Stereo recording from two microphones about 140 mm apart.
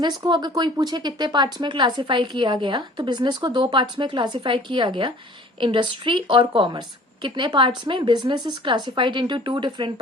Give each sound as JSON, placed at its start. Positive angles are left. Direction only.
{"t": 0.0, "sound": "speech", "side_deg": -30}